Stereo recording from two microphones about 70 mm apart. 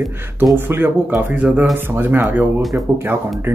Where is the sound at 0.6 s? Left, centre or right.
Right.